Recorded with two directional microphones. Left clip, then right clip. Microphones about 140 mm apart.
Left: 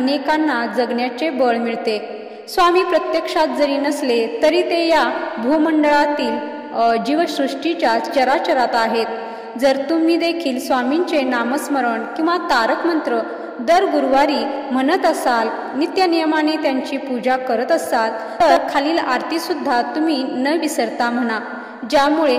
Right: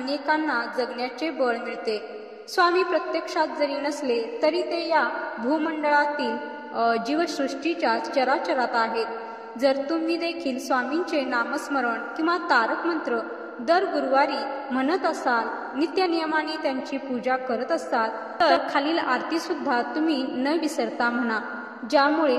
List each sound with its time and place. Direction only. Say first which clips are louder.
0.0 s a woman's voice: left 7 dB; 35° left (ahead or behind)